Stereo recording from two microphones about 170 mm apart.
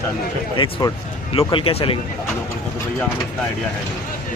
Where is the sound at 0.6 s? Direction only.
25° left (ahead or behind).